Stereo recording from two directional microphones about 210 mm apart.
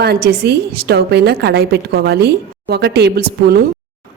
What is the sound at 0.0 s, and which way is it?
A woman's voice, 50° right (ahead or behind).